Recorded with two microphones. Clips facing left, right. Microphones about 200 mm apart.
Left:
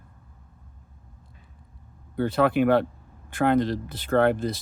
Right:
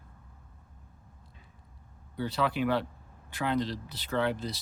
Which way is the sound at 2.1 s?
55° left (ahead or behind).